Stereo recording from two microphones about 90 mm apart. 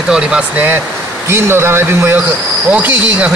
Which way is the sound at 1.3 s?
25° right (ahead or behind).